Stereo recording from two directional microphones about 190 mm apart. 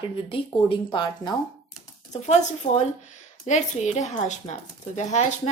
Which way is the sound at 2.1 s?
35° left (ahead or behind).